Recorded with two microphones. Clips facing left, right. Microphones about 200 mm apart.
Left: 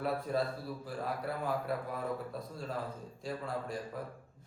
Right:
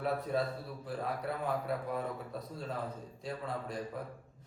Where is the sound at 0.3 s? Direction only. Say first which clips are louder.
Even; centre (ahead or behind).